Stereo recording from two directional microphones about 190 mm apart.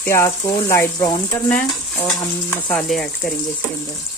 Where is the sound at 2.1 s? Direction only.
20° left (ahead or behind).